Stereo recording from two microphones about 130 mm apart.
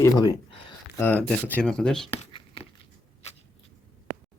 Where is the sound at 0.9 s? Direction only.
15° left (ahead or behind).